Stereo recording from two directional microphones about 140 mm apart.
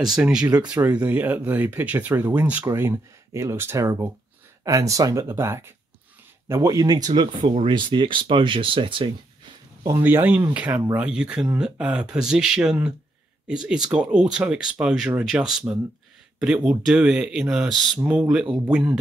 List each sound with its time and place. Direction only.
0.0 s speech: 5° right (ahead or behind); by 9.1 s 35° right (ahead or behind)
9.8 s speech: 20° right (ahead or behind)